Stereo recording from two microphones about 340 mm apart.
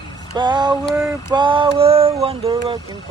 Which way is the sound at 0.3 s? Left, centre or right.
Centre.